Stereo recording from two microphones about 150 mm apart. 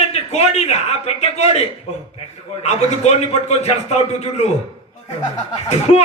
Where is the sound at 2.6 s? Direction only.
45° left (ahead or behind).